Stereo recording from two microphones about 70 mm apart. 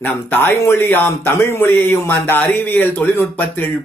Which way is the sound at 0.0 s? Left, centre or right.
Left.